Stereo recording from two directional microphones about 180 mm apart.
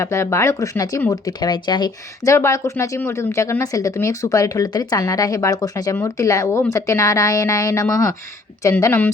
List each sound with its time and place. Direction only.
0.0 s speech: 15° left (ahead or behind)